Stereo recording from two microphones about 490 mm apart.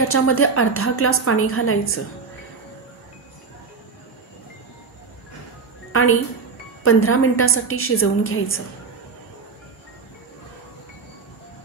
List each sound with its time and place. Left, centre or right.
0.1 s a woman's voice: left
5.9 s music: left
6.8 s a woman's voice: left